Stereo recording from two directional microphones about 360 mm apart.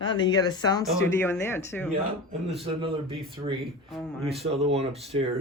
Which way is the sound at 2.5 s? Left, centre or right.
Centre.